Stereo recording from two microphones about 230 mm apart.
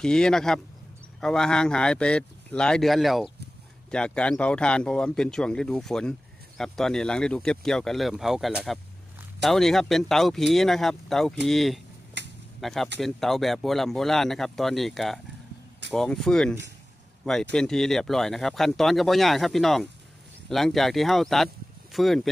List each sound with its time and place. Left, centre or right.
0.0 s speech: centre
12.2 s a sound: right
12.5 s speech: centre